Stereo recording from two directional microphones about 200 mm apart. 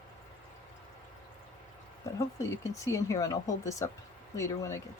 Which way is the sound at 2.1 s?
15° left (ahead or behind).